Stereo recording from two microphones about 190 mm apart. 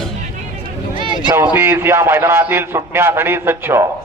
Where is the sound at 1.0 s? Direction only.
25° right (ahead or behind).